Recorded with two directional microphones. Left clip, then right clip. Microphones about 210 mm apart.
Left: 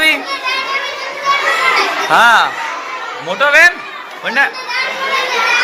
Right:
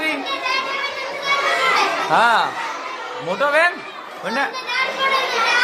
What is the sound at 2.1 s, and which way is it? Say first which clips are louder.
Speech: left 8 dB; 5° right (ahead or behind).